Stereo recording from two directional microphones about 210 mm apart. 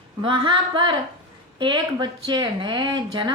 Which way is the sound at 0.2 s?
25° right (ahead or behind).